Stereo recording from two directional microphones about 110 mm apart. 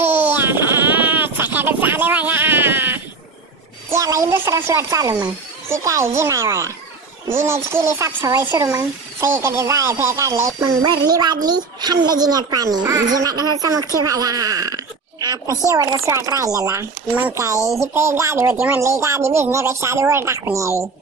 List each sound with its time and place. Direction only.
0.0 s baby cry: 20° right (ahead or behind)
3.9 s speech: 30° right (ahead or behind)
17.1 s speech: 15° right (ahead or behind)
17.4 s speech: 30° right (ahead or behind)